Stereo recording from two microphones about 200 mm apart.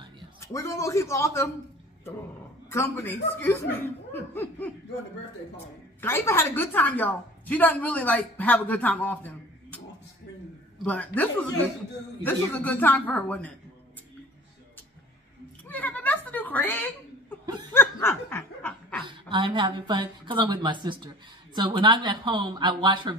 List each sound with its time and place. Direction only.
0.4 s a woman's voice: 15° left (ahead or behind)
2.7 s a woman's voice: 10° left (ahead or behind)
5.9 s a woman's voice: 10° left (ahead or behind)
10.8 s a woman's voice: 5° left (ahead or behind)
15.6 s a sound: 10° left (ahead or behind)
17.7 s laughter: 10° left (ahead or behind)
19.3 s a woman's voice: 25° right (ahead or behind)